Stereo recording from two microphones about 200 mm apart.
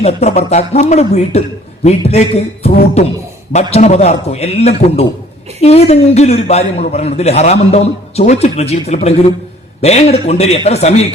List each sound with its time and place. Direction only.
0.0 s a man's voice: 30° left (ahead or behind)